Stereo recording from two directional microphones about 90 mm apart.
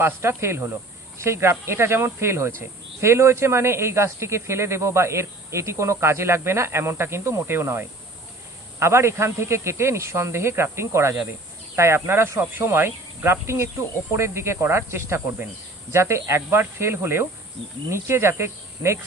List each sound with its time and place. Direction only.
0.0 s speech: 25° right (ahead or behind)